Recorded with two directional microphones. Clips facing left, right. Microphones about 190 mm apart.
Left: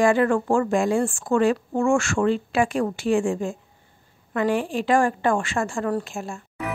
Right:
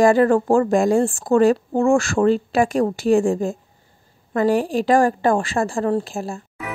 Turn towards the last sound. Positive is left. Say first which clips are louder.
# right 5 dB
turn(degrees=-35)  # may be behind; listen again after turning